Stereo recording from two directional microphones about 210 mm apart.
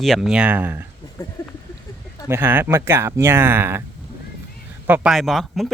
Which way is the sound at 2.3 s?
10° right (ahead or behind).